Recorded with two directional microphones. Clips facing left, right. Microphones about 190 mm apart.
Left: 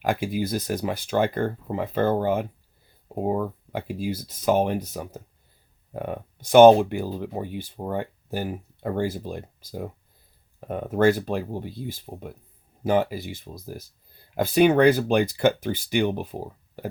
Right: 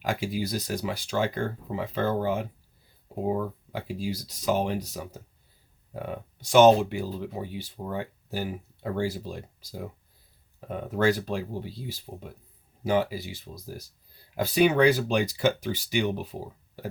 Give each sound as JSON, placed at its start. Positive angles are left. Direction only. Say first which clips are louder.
{"t": 0.0, "sound": "speech", "louder": "left 4 dB", "side_deg": 55}